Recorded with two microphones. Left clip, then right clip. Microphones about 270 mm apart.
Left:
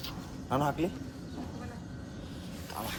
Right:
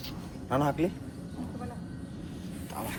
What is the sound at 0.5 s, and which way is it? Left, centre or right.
Speech, centre.